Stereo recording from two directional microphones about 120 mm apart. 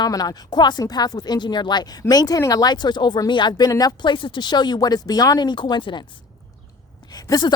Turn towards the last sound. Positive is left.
turn(degrees=35)  # may be behind; listen again after turning